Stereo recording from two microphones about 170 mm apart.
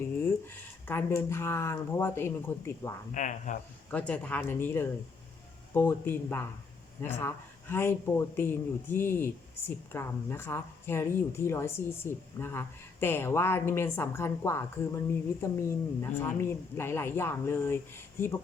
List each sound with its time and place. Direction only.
0.2 s speech: 10° left (ahead or behind)
3.2 s speech: 45° left (ahead or behind)
3.9 s speech: 10° left (ahead or behind)